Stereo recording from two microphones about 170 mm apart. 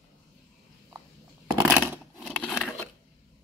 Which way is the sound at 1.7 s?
10° right (ahead or behind).